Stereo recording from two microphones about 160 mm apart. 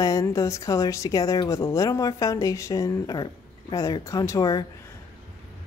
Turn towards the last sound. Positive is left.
turn(degrees=25)  # may be behind; listen again after turning